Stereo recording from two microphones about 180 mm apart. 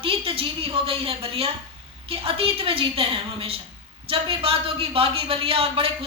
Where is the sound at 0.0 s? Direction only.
30° right (ahead or behind).